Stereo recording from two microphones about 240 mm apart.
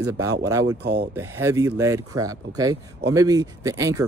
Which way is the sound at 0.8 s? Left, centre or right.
Right.